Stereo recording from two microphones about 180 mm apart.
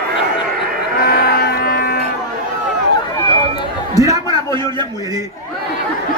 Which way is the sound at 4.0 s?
20° right (ahead or behind).